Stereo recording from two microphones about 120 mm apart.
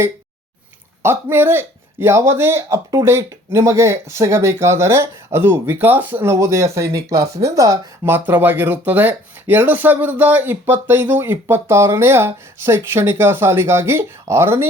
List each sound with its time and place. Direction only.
1.0 s speech: 20° right (ahead or behind)